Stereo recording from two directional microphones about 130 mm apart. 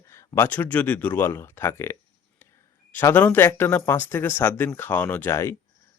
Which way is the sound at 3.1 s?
15° left (ahead or behind).